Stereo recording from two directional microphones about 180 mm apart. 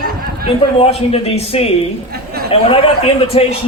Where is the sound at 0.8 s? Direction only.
35° left (ahead or behind).